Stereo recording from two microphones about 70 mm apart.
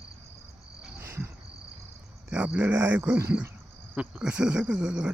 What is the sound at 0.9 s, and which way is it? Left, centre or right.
Cricket, right.